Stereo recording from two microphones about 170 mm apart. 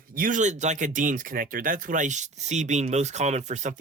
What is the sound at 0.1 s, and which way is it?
Speech, 55° right (ahead or behind).